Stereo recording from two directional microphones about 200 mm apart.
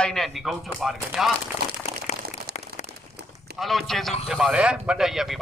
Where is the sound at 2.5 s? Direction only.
50° right (ahead or behind).